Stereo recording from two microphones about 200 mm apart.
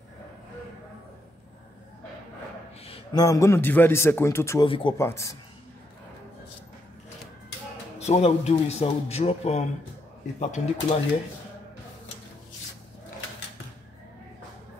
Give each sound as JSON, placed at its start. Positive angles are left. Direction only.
{"t": 2.8, "sound": "a man's voice", "side_deg": 25}
{"t": 4.6, "sound": "speech", "side_deg": 25}
{"t": 4.9, "sound": "a man's voice", "side_deg": 15}
{"t": 8.0, "sound": "speech", "side_deg": 30}